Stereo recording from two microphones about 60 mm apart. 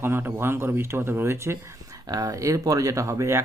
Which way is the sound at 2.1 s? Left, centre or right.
Right.